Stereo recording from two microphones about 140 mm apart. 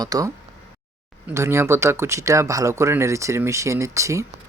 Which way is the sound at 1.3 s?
20° right (ahead or behind).